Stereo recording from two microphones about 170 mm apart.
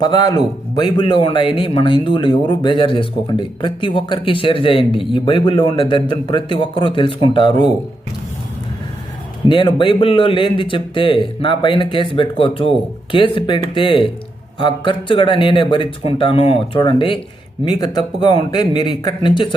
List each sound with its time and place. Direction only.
0.0 s speech: 25° left (ahead or behind)
9.5 s speech: 30° left (ahead or behind)